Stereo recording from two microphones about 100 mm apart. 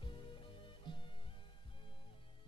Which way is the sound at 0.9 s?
50° left (ahead or behind).